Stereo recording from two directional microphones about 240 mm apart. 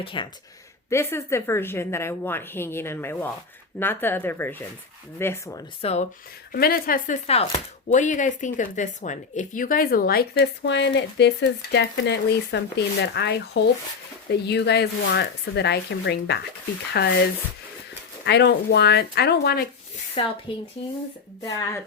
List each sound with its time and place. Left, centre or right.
0.0 s a woman's voice: left
5.8 s speech: left
6.5 s speech: left
18.3 s speech: left
20.2 s speech: left